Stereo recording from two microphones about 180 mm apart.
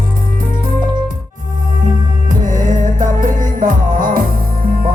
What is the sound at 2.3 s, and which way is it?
Music, 45° right (ahead or behind).